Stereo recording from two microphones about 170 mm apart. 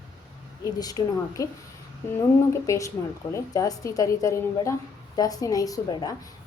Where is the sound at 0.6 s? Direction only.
20° left (ahead or behind).